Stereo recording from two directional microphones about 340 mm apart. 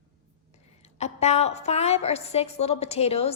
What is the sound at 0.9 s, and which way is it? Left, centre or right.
A woman's voice, centre.